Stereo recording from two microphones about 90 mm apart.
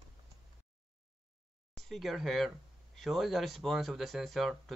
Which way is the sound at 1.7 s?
Centre (ahead or behind).